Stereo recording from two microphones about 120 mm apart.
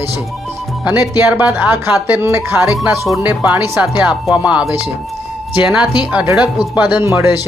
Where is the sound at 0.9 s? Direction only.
30° left (ahead or behind).